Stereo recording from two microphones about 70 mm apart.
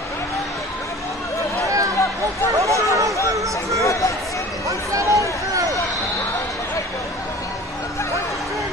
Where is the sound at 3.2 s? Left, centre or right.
Right.